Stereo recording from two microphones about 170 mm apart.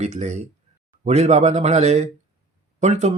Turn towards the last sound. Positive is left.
turn(degrees=-40)  # may be behind; listen again after turning